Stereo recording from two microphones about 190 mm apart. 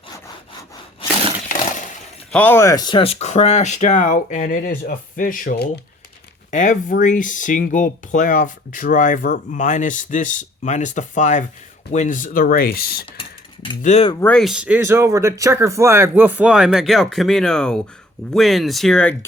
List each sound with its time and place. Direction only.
2.3 s speech: 10° left (ahead or behind); by 5.8 s 50° left (ahead or behind)
6.5 s speech: 40° left (ahead or behind)
13.8 s speech: 35° left (ahead or behind)
14.1 s speech: 10° left (ahead or behind)